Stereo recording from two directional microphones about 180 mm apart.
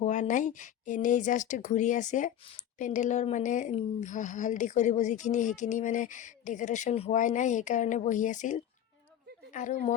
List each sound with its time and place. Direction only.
0.0 s a woman's voice: 45° left (ahead or behind)